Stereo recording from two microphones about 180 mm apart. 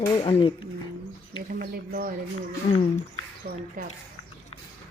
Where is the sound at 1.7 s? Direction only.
55° right (ahead or behind).